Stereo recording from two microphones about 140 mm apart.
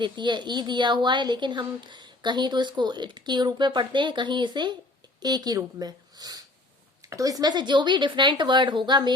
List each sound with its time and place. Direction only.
0.0 s a woman's voice: 35° right (ahead or behind)